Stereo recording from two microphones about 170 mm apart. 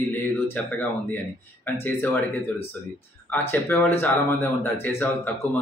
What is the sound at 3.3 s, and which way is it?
Speech, 15° left (ahead or behind).